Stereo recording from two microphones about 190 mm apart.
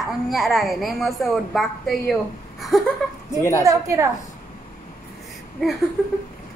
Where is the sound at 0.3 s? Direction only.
Centre (ahead or behind).